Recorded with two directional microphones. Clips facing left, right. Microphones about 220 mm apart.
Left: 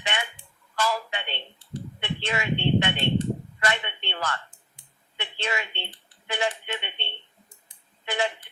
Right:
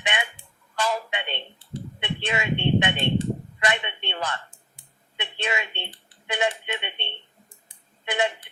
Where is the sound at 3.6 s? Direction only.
20° right (ahead or behind).